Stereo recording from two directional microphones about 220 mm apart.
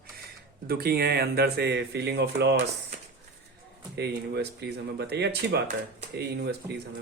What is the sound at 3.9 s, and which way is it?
Speech, 50° right (ahead or behind).